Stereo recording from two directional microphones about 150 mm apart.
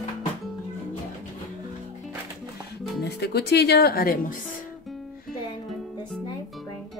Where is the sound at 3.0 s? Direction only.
90° left.